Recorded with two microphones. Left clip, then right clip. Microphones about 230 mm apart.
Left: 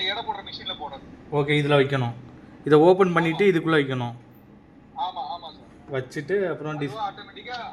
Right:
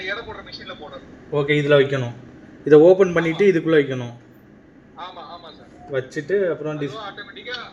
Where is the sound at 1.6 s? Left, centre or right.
Left.